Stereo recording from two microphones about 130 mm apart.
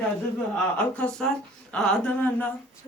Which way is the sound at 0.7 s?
10° left (ahead or behind).